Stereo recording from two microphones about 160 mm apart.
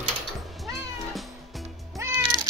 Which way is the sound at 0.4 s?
Centre (ahead or behind).